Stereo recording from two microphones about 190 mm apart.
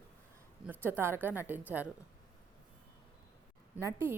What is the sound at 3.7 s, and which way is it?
Speech, 15° right (ahead or behind).